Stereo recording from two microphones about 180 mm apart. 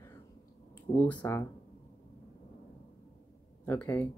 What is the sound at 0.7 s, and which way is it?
Speech, 10° left (ahead or behind).